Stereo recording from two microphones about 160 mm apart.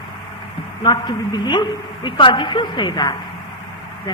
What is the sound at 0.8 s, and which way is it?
A woman's voice, 25° left (ahead or behind).